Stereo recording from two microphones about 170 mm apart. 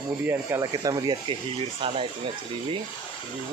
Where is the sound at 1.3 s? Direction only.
35° right (ahead or behind).